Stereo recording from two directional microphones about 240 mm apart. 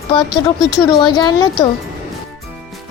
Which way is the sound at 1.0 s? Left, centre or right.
Centre.